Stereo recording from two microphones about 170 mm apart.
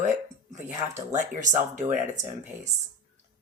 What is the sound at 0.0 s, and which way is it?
A woman's voice, 45° right (ahead or behind).